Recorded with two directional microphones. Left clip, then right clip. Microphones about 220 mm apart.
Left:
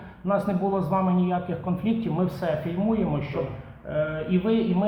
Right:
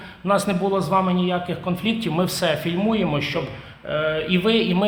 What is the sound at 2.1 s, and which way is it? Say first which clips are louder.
A man's voice: right 7 dB; 50° right (ahead or behind).